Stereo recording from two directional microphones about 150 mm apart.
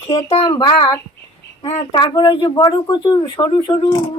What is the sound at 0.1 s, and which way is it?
Speech, 40° left (ahead or behind).